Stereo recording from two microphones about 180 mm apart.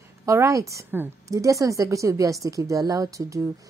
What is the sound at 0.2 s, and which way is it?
A woman's voice, 15° right (ahead or behind).